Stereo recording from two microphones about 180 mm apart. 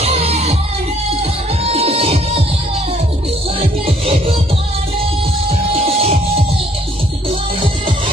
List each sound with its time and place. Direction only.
0.0 s music: 35° right (ahead or behind)
3.8 s music: 30° right (ahead or behind)
5.5 s music: 35° right (ahead or behind)